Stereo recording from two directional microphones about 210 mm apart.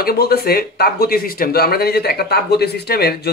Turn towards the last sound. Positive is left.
turn(degrees=50)  # may be behind; listen again after turning